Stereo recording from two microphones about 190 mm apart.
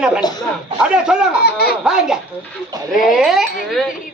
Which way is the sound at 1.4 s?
55° left (ahead or behind).